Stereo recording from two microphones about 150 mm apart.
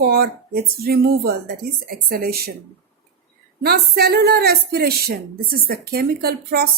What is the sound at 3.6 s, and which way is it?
A woman's voice, 90° right.